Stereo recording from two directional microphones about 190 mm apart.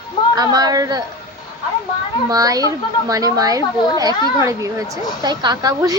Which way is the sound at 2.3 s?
20° right (ahead or behind).